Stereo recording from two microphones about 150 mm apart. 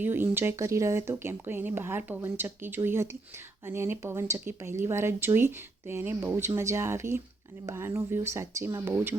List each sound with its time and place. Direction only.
0.0 s speech: 15° right (ahead or behind)